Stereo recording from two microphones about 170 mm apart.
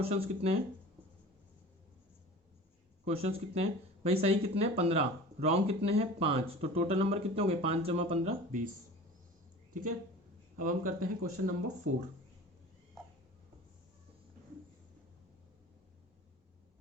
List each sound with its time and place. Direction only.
0.0 s speech: 35° right (ahead or behind)
3.1 s speech: 35° right (ahead or behind)
10.6 s speech: 55° right (ahead or behind)